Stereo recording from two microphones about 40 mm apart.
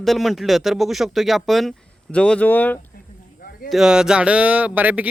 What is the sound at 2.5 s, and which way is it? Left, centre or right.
Speech, left.